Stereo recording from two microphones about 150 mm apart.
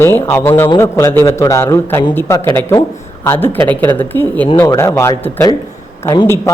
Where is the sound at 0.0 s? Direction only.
15° left (ahead or behind).